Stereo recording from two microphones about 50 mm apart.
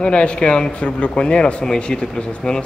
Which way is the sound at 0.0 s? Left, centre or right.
Left.